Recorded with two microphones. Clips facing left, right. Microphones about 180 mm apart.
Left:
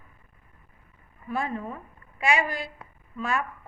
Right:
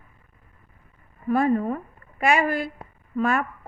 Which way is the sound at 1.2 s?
55° right (ahead or behind).